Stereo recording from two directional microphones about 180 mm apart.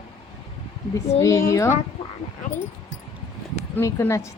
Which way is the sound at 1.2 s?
20° left (ahead or behind).